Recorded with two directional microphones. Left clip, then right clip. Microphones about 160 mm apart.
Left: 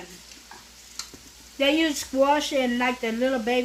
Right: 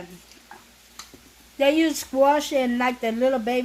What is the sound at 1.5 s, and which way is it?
Speech, 90° right.